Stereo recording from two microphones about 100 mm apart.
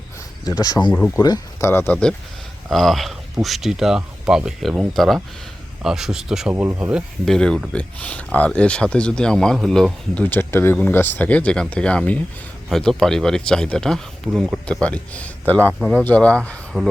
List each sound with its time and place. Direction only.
0.4 s speech: 40° left (ahead or behind)
0.9 s speech: 20° left (ahead or behind)
2.6 s speech: centre (ahead or behind)
6.5 s speech: 15° right (ahead or behind)
7.3 s speech: 5° left (ahead or behind)
10.2 s speech: 20° left (ahead or behind)
15.8 s speech: 5° right (ahead or behind)
16.0 s speech: 10° left (ahead or behind)